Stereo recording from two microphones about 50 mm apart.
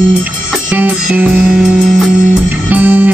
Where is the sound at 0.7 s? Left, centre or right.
Right.